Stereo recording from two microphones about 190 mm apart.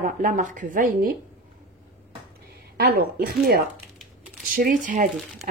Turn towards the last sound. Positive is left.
turn(degrees=-45)  # may be behind; listen again after turning